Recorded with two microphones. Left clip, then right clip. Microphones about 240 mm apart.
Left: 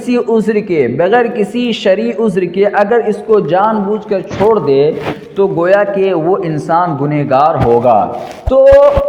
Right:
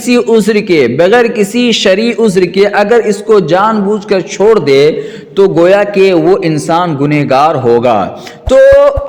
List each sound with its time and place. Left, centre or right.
0.1 s a man's voice: right